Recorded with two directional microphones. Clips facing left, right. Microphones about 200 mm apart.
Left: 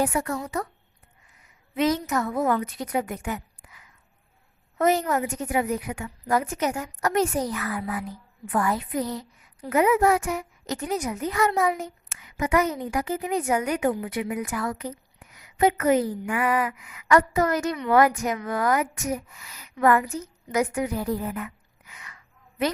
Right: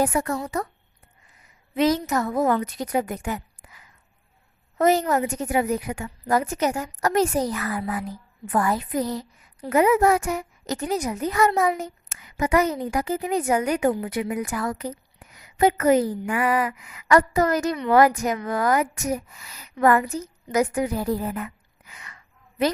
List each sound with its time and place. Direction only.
0.0 s a woman's voice: 40° right (ahead or behind)
1.7 s a woman's voice: 35° right (ahead or behind)